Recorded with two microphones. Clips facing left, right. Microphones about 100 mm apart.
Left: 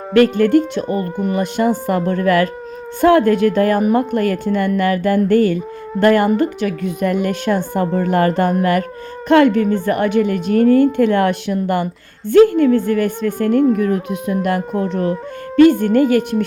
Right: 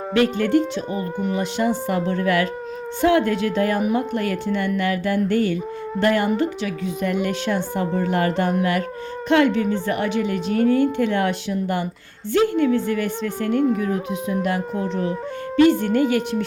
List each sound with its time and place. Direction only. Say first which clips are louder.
0.1 s speech: left 6 dB; 50° left (ahead or behind)
14.8 s speech: left 5 dB; 55° left (ahead or behind)
15.8 s speech: left 6 dB; 45° left (ahead or behind)